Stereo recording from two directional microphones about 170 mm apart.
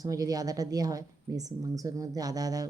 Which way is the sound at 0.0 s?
20° right (ahead or behind).